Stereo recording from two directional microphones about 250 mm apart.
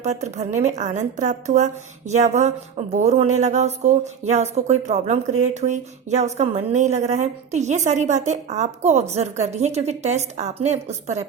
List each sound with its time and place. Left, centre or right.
0.0 s speech: right